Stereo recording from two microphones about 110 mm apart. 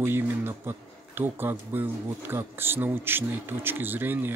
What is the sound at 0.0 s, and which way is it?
Speech, 20° right (ahead or behind).